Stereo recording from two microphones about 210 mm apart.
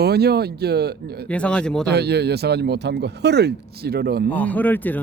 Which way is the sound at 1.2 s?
5° left (ahead or behind).